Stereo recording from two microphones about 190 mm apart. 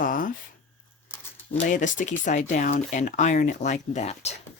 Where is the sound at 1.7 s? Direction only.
40° left (ahead or behind).